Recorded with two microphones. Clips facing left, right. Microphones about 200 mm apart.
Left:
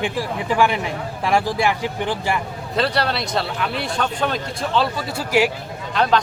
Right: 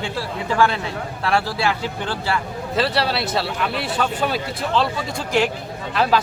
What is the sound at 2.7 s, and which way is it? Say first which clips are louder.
Speech: even; centre (ahead or behind).